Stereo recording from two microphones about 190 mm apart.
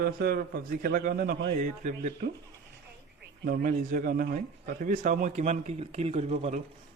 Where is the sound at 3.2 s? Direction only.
45° right (ahead or behind).